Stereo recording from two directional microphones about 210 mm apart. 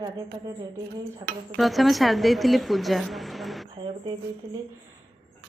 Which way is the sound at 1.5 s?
Centre (ahead or behind).